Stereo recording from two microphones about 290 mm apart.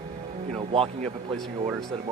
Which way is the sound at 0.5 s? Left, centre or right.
Centre.